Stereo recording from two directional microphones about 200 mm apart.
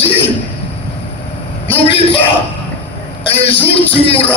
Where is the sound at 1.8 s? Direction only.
30° left (ahead or behind).